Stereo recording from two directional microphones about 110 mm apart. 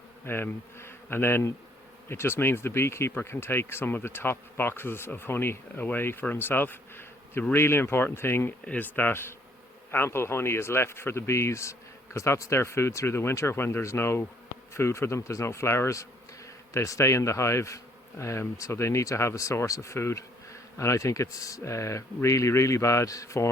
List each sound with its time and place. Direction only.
0.3 s speech: 20° left (ahead or behind)